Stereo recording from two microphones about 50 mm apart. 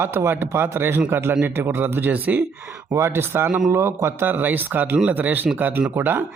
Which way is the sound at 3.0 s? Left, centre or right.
Right.